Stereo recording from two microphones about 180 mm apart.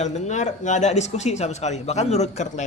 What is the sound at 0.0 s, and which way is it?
Speech, 40° left (ahead or behind).